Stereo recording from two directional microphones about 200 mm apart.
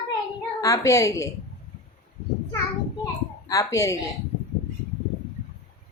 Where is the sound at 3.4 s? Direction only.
15° left (ahead or behind).